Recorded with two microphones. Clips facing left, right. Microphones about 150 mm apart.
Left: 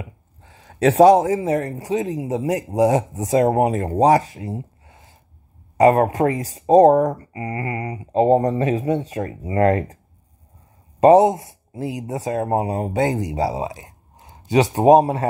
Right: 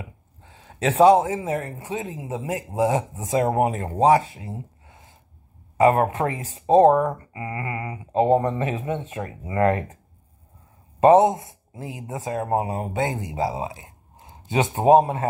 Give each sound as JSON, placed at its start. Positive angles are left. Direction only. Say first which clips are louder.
{"t": 0.7, "sound": "speech", "louder": "left 3 dB", "side_deg": 40}
{"t": 11.7, "sound": "speech", "louder": "left 8 dB", "side_deg": 75}
{"t": 12.1, "sound": "speech", "louder": "left 2 dB", "side_deg": 40}
{"t": 13.2, "sound": "speech", "louder": "left 4 dB", "side_deg": 70}
{"t": 13.5, "sound": "speech", "louder": "left 3 dB", "side_deg": 40}
{"t": 14.8, "sound": "speech", "louder": "left 2 dB", "side_deg": 35}